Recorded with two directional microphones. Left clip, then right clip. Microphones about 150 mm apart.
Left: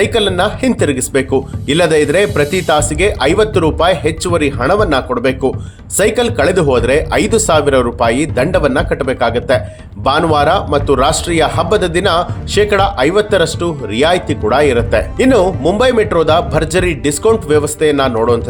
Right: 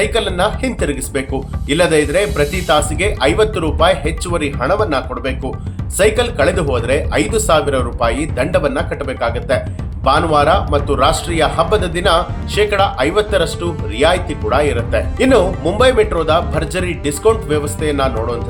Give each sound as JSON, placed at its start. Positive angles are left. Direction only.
{"t": 0.0, "sound": "speech", "side_deg": 50}